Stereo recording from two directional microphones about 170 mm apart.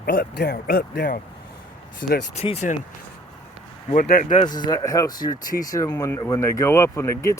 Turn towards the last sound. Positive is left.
turn(degrees=15)  # may be behind; listen again after turning